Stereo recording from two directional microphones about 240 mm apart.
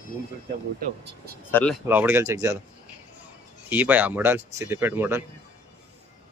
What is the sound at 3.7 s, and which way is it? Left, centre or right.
Speech, centre.